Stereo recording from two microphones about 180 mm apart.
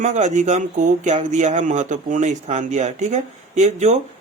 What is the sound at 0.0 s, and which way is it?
Speech, 40° right (ahead or behind).